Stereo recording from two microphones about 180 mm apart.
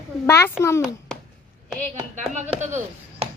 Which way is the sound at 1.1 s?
5° left (ahead or behind).